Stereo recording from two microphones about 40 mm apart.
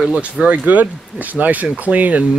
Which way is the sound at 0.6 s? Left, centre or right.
Right.